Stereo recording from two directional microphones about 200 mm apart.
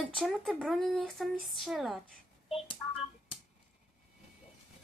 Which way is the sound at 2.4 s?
30° left (ahead or behind).